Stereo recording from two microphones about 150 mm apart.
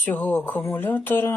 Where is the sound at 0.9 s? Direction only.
15° left (ahead or behind).